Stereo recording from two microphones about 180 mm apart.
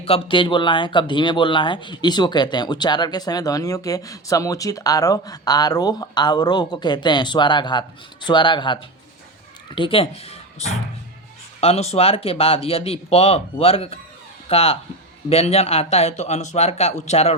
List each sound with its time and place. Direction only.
0.0 s speech: 30° left (ahead or behind)